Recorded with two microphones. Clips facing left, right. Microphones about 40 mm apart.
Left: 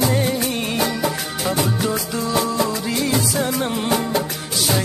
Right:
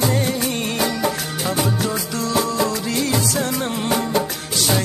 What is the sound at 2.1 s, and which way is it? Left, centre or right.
Music, centre.